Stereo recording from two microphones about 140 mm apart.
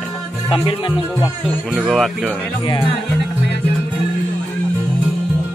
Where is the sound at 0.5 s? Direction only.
35° left (ahead or behind).